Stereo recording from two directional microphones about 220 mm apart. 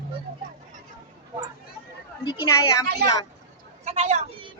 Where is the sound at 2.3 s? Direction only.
15° left (ahead or behind).